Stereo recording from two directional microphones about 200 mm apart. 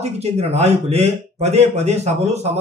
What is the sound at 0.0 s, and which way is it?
A man's voice, 30° right (ahead or behind).